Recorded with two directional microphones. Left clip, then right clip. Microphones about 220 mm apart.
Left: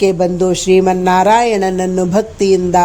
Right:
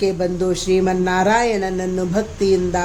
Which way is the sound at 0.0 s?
30° left (ahead or behind).